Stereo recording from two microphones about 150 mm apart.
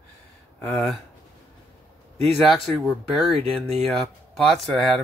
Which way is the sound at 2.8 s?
Centre (ahead or behind).